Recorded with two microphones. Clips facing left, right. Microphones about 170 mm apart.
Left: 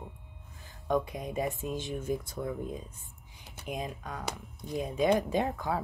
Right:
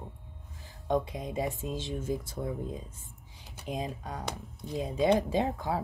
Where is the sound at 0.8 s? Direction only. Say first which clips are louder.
Even; 25° right (ahead or behind).